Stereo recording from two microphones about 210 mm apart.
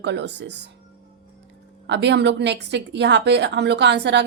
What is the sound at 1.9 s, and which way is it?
Speech, 55° right (ahead or behind).